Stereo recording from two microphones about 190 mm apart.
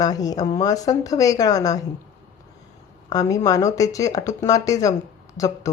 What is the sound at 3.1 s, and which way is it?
Speech, 15° left (ahead or behind).